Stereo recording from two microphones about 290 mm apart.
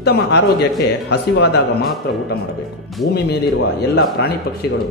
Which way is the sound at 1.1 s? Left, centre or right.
Left.